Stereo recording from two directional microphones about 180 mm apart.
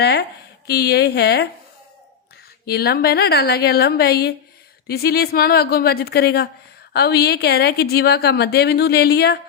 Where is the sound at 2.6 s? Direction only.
60° left (ahead or behind).